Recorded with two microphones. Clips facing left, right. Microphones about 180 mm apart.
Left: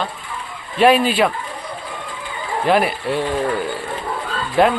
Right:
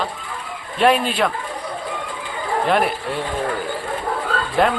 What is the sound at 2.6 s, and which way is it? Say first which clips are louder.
Speech: left 3 dB; centre (ahead or behind).